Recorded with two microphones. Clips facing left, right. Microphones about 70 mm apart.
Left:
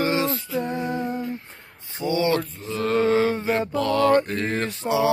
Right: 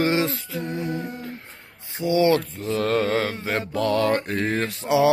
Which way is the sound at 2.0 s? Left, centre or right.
Left.